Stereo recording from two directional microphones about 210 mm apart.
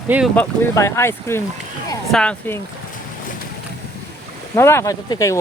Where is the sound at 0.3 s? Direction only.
15° left (ahead or behind).